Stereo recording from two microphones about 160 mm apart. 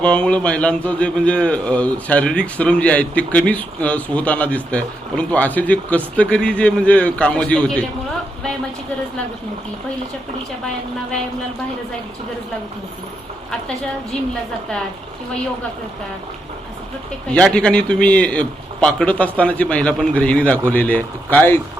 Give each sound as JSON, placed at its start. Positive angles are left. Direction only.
{"t": 0.0, "sound": "speech", "side_deg": 5}
{"t": 17.3, "sound": "speech", "side_deg": 5}